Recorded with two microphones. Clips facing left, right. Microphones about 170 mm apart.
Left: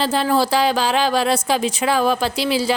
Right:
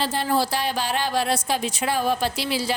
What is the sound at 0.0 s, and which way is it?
A woman's voice, 90° left.